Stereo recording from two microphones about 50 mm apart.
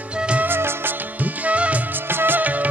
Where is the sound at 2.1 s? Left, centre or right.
Right.